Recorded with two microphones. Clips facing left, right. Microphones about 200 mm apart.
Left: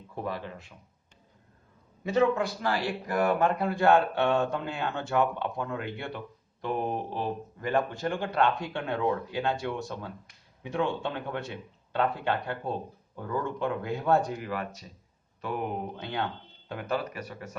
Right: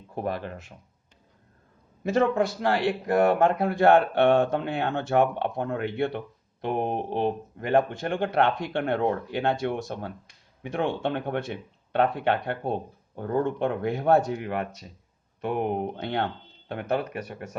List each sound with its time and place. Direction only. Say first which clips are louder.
0.1 s speech: right 4 dB; 45° right (ahead or behind)
2.0 s a man's voice: right 2 dB; 50° right (ahead or behind)